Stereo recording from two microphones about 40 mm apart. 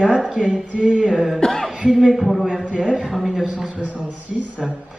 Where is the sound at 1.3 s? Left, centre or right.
Centre.